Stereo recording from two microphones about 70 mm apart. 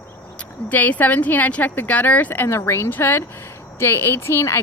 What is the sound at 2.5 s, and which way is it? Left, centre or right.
Speech, left.